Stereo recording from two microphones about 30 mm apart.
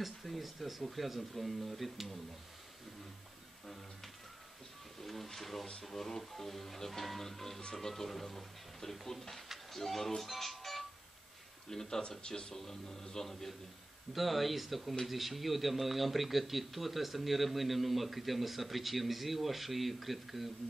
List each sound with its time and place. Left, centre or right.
0.0 s speech: centre
5.0 s speech: centre
11.7 s speech: centre
12.2 s speech: left
12.5 s speech: centre
14.1 s speech: centre